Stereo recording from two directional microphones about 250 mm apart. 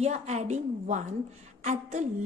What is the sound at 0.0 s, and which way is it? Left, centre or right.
A woman's voice, right.